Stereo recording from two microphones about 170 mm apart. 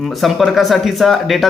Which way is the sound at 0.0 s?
Centre (ahead or behind).